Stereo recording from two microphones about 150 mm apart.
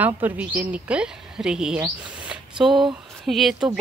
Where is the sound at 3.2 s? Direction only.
Centre (ahead or behind).